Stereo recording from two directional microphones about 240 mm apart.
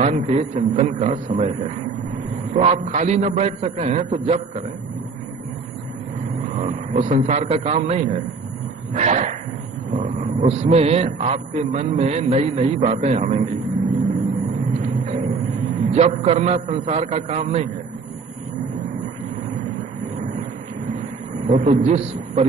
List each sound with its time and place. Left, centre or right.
0.0 s a man's voice: right
2.5 s a man's voice: right
6.5 s a man's voice: right
14.8 s a sound: right
15.9 s a man's voice: right
21.5 s a man's voice: right